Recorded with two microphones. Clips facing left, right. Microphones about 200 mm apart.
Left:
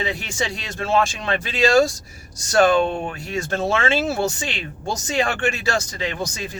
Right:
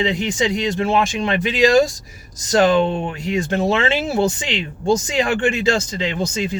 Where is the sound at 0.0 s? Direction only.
20° right (ahead or behind).